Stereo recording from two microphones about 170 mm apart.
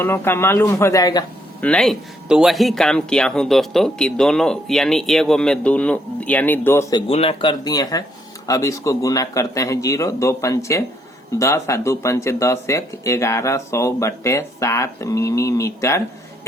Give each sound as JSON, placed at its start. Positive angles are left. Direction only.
{"t": 0.0, "sound": "speech", "side_deg": 15}
{"t": 1.6, "sound": "speech", "side_deg": 5}
{"t": 7.1, "sound": "speech", "side_deg": 35}
{"t": 7.6, "sound": "a man's voice", "side_deg": 20}